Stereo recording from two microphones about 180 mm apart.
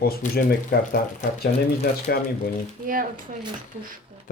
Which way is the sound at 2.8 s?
50° right (ahead or behind).